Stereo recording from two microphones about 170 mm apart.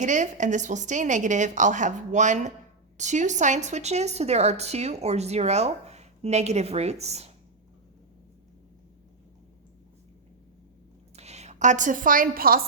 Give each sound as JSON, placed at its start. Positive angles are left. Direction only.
{"t": 0.0, "sound": "a woman's voice", "side_deg": -45}
{"t": 11.2, "sound": "a woman's voice", "side_deg": -40}